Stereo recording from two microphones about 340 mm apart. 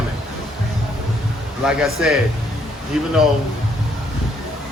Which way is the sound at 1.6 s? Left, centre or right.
Centre.